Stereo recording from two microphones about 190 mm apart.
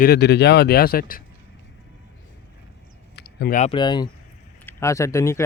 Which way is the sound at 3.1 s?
60° left (ahead or behind).